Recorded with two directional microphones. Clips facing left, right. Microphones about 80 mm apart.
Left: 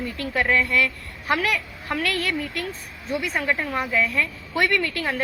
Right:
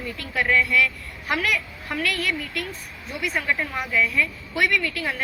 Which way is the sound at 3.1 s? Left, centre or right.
Left.